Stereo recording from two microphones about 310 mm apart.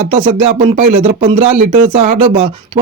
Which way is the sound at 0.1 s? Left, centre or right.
Centre.